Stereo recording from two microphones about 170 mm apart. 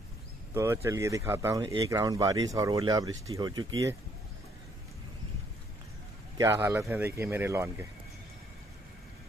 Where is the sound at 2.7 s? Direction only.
30° right (ahead or behind).